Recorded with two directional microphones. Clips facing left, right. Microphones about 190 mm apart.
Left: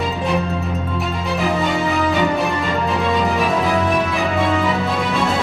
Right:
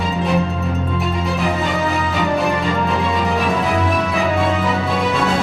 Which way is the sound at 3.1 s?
Centre (ahead or behind).